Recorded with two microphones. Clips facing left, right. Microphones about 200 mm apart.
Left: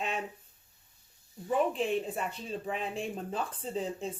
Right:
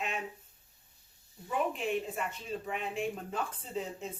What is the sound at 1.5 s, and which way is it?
Speech, 35° left (ahead or behind).